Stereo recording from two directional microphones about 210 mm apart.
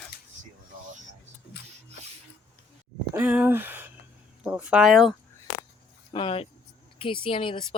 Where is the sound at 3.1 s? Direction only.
10° right (ahead or behind).